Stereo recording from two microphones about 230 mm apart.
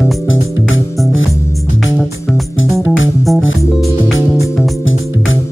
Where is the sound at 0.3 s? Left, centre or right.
Left.